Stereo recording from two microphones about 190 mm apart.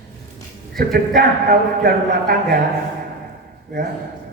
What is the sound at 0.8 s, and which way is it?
A man's voice, 50° right (ahead or behind).